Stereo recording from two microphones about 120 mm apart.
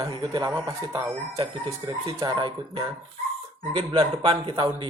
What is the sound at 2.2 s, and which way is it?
Speech, 40° right (ahead or behind).